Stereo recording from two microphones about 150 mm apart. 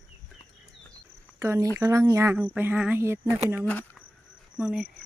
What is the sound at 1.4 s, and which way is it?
Speech, 20° right (ahead or behind).